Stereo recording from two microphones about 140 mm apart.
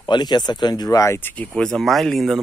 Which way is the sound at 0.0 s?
30° left (ahead or behind).